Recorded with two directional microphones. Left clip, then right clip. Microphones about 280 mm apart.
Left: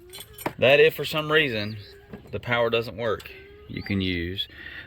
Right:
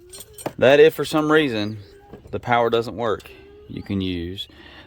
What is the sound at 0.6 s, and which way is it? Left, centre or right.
Speech, centre.